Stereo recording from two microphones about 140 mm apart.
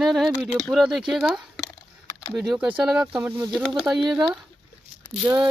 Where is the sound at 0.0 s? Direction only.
Centre (ahead or behind).